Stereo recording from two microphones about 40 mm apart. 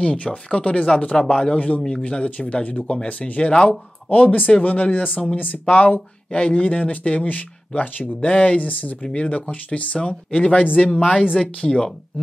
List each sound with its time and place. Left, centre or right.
0.0 s speech: left
9.0 s speech: left
10.6 s speech: left
10.9 s speech: left
11.4 s speech: left